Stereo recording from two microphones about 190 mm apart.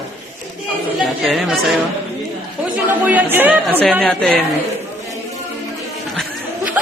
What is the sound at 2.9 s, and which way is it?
Speech, 10° right (ahead or behind).